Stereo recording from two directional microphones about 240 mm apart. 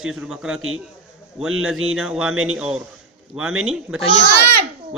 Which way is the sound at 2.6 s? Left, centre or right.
Centre.